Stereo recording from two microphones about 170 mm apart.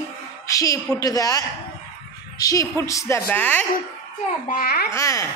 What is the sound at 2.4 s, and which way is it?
A woman's voice, 20° left (ahead or behind).